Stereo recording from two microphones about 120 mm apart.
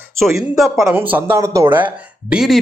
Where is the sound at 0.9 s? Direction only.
15° right (ahead or behind).